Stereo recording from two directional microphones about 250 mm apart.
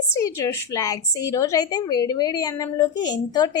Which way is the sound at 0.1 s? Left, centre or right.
Centre.